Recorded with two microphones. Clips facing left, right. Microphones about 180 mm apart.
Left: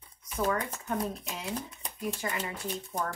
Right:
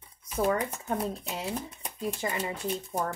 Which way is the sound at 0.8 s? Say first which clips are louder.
Right 2 dB; 30° right (ahead or behind).